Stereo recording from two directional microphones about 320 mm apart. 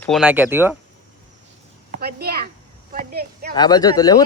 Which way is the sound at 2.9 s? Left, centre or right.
Right.